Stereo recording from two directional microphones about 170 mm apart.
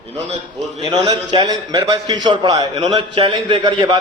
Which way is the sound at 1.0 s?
25° right (ahead or behind).